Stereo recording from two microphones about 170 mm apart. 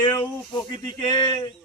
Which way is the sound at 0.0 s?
15° left (ahead or behind).